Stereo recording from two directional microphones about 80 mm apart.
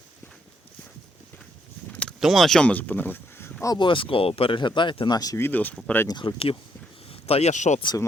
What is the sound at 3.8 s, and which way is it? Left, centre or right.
Speech, left.